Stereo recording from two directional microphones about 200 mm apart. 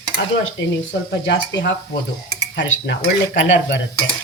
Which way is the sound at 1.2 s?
60° left (ahead or behind).